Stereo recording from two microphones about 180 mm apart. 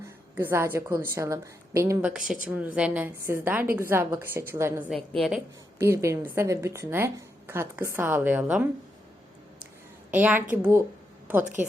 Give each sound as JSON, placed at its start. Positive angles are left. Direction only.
{"t": 0.3, "sound": "a woman's voice", "side_deg": -15}
{"t": 4.9, "sound": "a woman's voice", "side_deg": 0}
{"t": 5.8, "sound": "a woman's voice", "side_deg": -15}
{"t": 10.1, "sound": "a woman's voice", "side_deg": -10}